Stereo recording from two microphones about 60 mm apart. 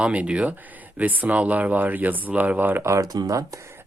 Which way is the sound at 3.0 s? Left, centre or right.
Right.